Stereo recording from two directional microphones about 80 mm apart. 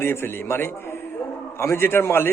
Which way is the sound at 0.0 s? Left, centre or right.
Left.